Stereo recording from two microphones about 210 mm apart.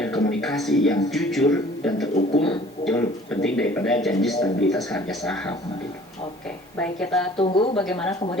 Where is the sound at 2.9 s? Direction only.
5° left (ahead or behind).